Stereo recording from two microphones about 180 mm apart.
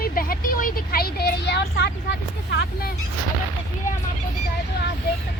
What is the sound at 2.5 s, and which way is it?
Speech, 65° left (ahead or behind).